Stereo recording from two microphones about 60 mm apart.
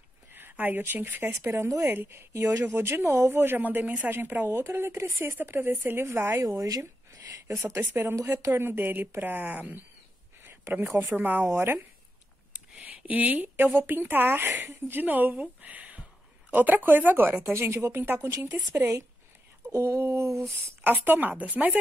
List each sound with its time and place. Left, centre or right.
0.3 s speech: right
1.3 s a woman's voice: right
6.4 s speech: right
7.8 s a woman's voice: right
10.4 s a woman's voice: right
11.4 s speech: right
12.5 s a sound: right
13.7 s a woman's voice: right
15.6 s a sound: right
16.5 s a woman's voice: right
17.4 s a woman's voice: right
19.7 s speech: right
20.8 s speech: right